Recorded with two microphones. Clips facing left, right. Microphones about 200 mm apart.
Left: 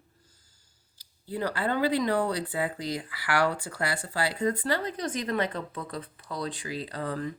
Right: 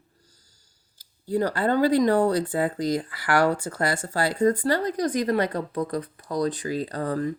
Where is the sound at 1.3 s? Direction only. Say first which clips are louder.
Right 6 dB; 45° right (ahead or behind).